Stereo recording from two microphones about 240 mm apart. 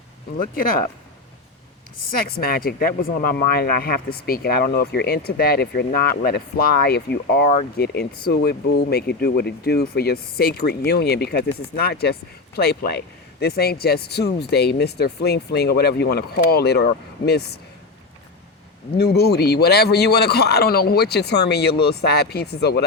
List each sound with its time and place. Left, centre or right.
0.5 s speech: left
2.2 s speech: left
18.9 s speech: left